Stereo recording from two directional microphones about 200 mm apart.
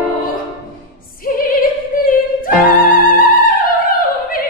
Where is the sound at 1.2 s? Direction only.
45° left (ahead or behind).